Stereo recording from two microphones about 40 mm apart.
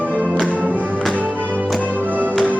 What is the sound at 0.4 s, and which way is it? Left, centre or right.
Music, right.